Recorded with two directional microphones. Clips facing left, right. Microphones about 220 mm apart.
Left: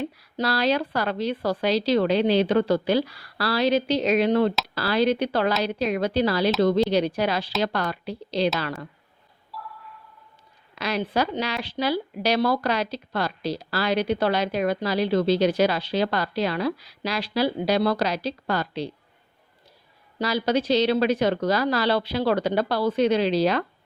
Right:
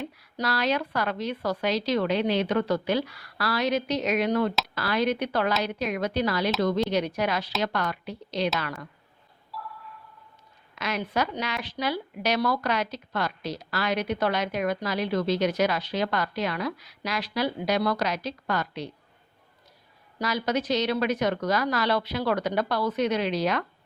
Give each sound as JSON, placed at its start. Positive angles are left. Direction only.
{"t": 0.0, "sound": "speech", "side_deg": 30}
{"t": 9.5, "sound": "a sound", "side_deg": 0}
{"t": 10.8, "sound": "speech", "side_deg": 35}
{"t": 20.1, "sound": "speech", "side_deg": 30}